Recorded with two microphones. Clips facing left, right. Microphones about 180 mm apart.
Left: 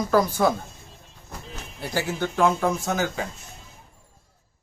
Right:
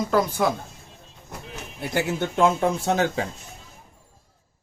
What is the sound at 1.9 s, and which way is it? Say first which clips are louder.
Speech: right 2 dB; 25° right (ahead or behind).